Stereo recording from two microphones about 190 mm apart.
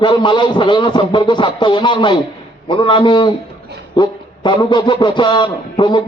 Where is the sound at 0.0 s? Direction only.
25° left (ahead or behind).